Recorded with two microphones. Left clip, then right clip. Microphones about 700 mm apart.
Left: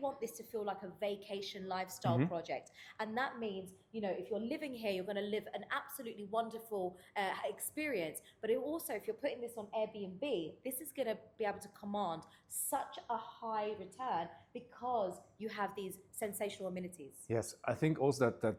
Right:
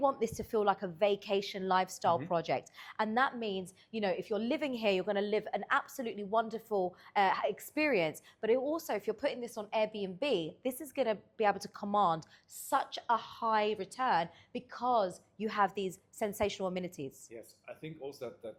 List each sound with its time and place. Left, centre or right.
0.0 s a woman's voice: right
17.3 s speech: left